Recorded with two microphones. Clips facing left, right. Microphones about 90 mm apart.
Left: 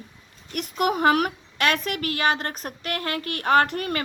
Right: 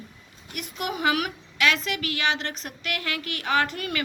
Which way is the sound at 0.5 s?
50° left (ahead or behind).